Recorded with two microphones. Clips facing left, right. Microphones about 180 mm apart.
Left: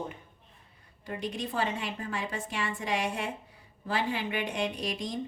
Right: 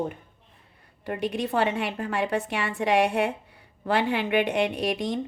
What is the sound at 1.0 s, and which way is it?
A woman's voice, 65° right (ahead or behind).